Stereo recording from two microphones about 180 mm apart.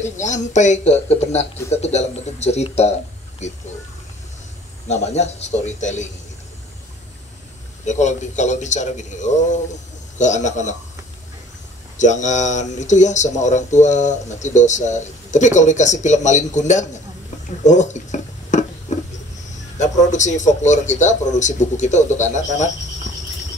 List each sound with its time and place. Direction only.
0.0 s speech: 40° left (ahead or behind)
4.8 s speech: 40° left (ahead or behind)
7.8 s speech: 40° left (ahead or behind)
12.0 s speech: 40° left (ahead or behind)
17.6 s a sound: 40° left (ahead or behind)
19.8 s speech: 40° left (ahead or behind)